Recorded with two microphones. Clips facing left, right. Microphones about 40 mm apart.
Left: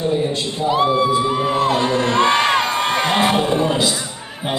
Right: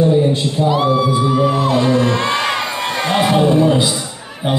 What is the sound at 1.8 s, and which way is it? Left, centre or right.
Music, left.